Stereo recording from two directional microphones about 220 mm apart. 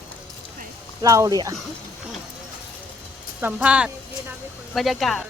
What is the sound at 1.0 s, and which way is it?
Speech, 15° right (ahead or behind).